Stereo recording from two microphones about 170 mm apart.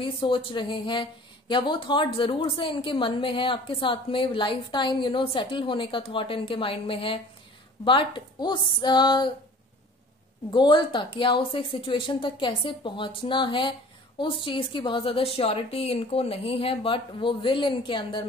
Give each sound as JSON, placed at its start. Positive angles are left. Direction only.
{"t": 0.0, "sound": "a woman's voice", "side_deg": 30}
{"t": 10.5, "sound": "a woman's voice", "side_deg": 25}